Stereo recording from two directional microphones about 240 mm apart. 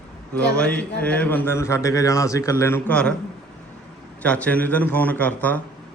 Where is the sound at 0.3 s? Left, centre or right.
Centre.